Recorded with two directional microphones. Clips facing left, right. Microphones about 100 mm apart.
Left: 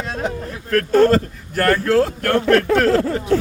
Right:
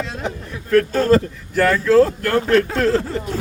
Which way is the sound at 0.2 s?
45° left (ahead or behind).